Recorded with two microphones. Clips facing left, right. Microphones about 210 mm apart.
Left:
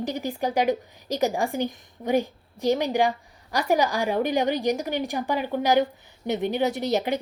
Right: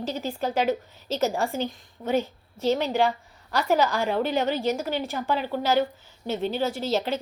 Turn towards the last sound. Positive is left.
turn(degrees=15)  # may be behind; listen again after turning